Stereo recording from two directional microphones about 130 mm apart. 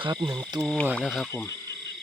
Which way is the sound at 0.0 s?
35° right (ahead or behind).